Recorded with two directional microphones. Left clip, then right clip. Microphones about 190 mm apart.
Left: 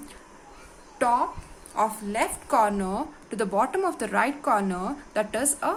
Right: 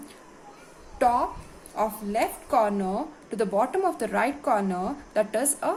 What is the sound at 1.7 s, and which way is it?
A woman's voice, 25° left (ahead or behind).